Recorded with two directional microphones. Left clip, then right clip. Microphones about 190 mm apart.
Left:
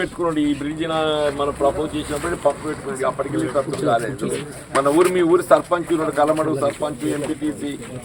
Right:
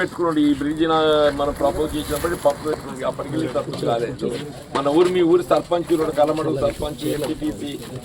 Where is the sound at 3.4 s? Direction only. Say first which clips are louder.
Left 1 dB; 45° left (ahead or behind).